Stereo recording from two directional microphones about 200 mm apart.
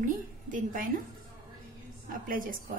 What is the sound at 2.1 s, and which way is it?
Speech, 45° right (ahead or behind).